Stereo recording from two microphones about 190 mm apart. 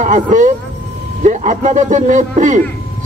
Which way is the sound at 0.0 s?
40° right (ahead or behind).